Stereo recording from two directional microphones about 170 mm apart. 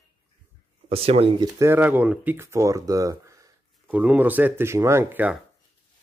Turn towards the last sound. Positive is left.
turn(degrees=-10)  # may be behind; listen again after turning